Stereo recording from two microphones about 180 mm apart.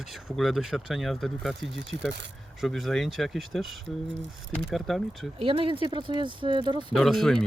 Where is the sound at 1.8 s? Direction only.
75° right (ahead or behind).